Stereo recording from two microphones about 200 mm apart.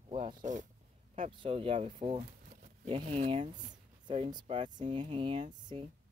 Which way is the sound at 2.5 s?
40° right (ahead or behind).